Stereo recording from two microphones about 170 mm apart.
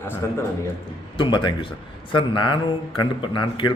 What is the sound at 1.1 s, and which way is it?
A man's voice, 30° left (ahead or behind).